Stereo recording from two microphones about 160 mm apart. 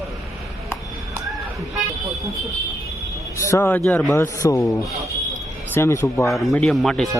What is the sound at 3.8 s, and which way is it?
Speech, centre (ahead or behind).